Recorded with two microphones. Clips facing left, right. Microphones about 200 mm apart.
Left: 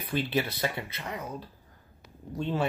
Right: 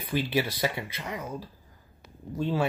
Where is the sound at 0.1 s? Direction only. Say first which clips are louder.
Right 2 dB; 10° right (ahead or behind).